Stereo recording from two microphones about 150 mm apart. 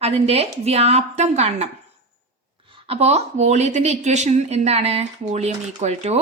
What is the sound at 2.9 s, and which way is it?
Speech, 45° right (ahead or behind).